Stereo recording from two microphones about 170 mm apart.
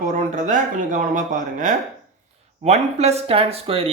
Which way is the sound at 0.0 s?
50° right (ahead or behind).